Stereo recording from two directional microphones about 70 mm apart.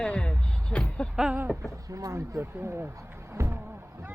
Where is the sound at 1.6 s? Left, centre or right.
Right.